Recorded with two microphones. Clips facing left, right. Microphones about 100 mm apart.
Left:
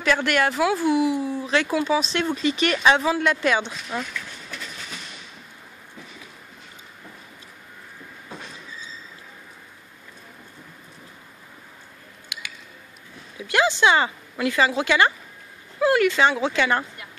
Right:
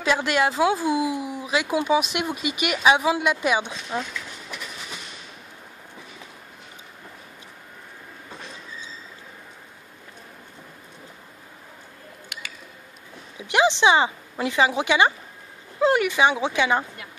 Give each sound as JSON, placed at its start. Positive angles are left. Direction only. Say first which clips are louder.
{"t": 0.0, "sound": "speech", "louder": "even", "side_deg": -20}
{"t": 13.4, "sound": "speech", "louder": "right 1 dB", "side_deg": -20}